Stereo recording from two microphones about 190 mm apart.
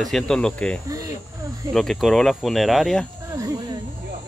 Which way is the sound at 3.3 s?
15° right (ahead or behind).